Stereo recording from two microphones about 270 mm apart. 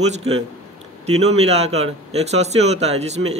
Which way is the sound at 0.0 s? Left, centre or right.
Right.